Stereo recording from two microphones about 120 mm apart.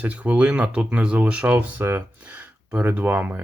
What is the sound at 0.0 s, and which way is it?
Speech, 15° right (ahead or behind).